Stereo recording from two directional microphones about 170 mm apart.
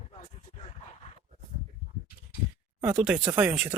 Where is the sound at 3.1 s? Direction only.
15° right (ahead or behind).